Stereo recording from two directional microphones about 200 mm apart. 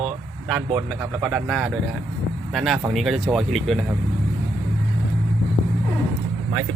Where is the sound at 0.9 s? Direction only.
Centre (ahead or behind).